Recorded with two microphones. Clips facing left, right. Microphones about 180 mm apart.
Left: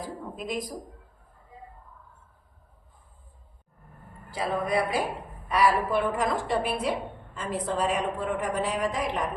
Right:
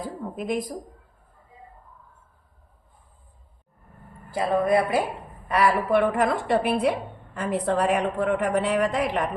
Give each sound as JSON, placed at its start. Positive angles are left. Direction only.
{"t": 0.3, "sound": "a woman's voice", "side_deg": -55}
{"t": 4.3, "sound": "a woman's voice", "side_deg": -60}